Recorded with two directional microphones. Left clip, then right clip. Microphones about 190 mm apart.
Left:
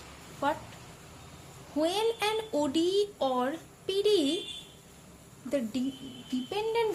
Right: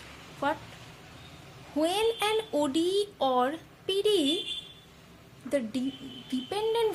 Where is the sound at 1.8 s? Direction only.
20° right (ahead or behind).